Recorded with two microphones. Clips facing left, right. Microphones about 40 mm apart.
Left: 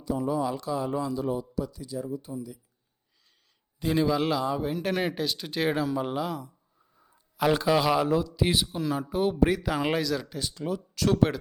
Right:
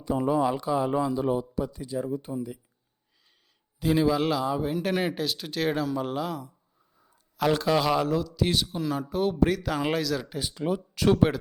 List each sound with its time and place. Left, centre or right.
0.0 s speech: right
0.5 s speech: right
3.8 s a man's voice: centre
8.0 s speech: centre
10.2 s speech: centre